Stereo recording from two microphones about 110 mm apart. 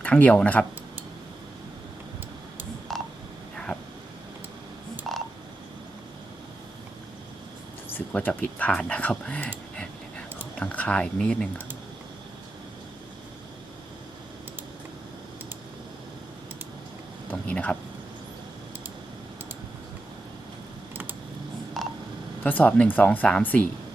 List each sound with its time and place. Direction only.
0.0 s speech: 10° left (ahead or behind)
2.9 s telephone dialing: centre (ahead or behind)
5.1 s frog: centre (ahead or behind)
7.9 s speech: 15° left (ahead or behind)
17.3 s a sound: 10° left (ahead or behind)
20.9 s typing: 20° right (ahead or behind)
21.8 s telephone dialing: centre (ahead or behind)
22.4 s speech: 15° left (ahead or behind)